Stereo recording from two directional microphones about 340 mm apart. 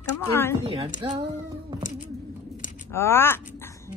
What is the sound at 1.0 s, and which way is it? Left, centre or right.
Speech, centre.